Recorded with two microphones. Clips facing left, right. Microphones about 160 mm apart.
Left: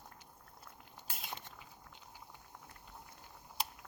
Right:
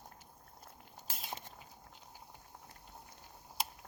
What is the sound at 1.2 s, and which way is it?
Cutlery, 40° right (ahead or behind).